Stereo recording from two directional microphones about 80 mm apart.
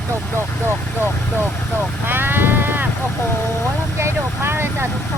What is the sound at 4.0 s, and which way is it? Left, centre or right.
Vehicle, right.